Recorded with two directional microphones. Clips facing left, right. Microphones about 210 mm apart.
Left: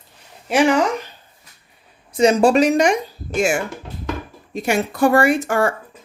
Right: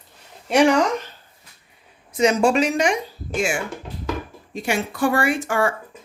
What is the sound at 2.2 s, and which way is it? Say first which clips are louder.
Speech: left 4 dB; 30° left (ahead or behind).